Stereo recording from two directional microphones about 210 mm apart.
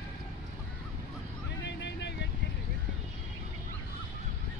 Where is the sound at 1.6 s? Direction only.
55° left (ahead or behind).